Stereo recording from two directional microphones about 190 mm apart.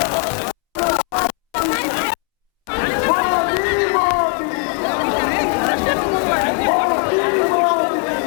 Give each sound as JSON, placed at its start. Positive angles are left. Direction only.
{"t": 0.0, "sound": "music", "side_deg": 20}
{"t": 2.7, "sound": "hubbub", "side_deg": 15}
{"t": 4.6, "sound": "chatter", "side_deg": 20}